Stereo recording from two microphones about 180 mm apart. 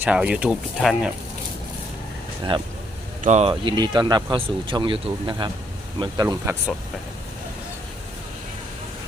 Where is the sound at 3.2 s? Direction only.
40° right (ahead or behind); by 6.5 s 20° right (ahead or behind).